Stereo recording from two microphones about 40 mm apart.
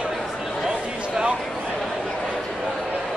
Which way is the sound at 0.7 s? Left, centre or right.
Centre.